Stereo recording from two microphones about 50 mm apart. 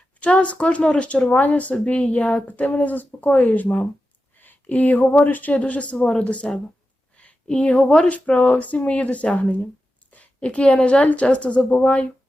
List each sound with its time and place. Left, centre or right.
0.2 s speech: left
7.2 s a sound: left
7.8 s a woman's voice: centre
8.0 s speech: left
10.1 s a sound: left
11.0 s speech: left